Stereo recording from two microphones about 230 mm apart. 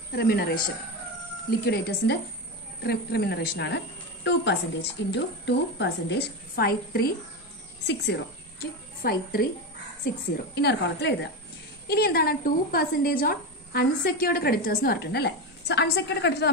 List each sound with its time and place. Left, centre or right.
0.1 s a woman's voice: left
1.6 s a woman's voice: left
10.5 s a woman's voice: left